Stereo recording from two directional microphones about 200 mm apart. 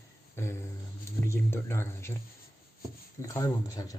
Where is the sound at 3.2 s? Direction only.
15° left (ahead or behind).